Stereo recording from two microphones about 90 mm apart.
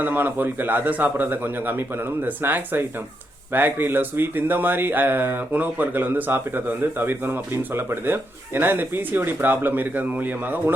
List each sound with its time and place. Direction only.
0.0 s speech: 20° right (ahead or behind)